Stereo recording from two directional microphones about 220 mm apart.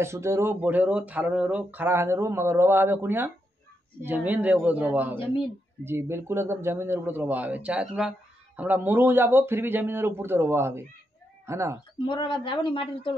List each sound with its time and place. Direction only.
0.0 s a man's voice: 10° right (ahead or behind)
12.0 s speech: 20° left (ahead or behind)